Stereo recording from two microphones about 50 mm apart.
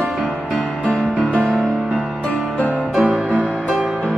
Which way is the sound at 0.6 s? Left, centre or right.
Left.